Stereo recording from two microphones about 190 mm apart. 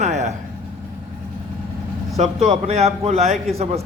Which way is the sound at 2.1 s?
35° right (ahead or behind).